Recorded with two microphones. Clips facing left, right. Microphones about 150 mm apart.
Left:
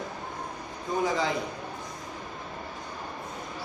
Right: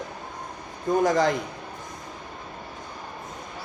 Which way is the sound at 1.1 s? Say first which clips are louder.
Right 7 dB; 45° right (ahead or behind).